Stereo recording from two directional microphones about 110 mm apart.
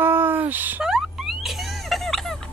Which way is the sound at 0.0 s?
20° right (ahead or behind).